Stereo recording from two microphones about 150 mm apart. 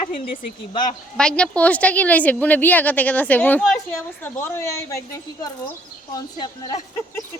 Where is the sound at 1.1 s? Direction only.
5° left (ahead or behind); by 6.8 s 25° left (ahead or behind).